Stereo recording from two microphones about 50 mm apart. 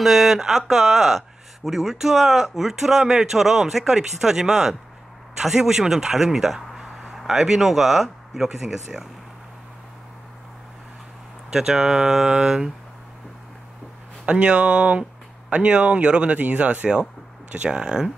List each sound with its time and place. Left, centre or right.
0.0 s a man's voice: centre
11.5 s a man's voice: centre
14.2 s speech: right